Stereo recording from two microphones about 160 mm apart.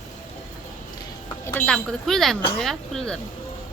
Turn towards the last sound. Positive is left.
turn(degrees=5)  # may be behind; listen again after turning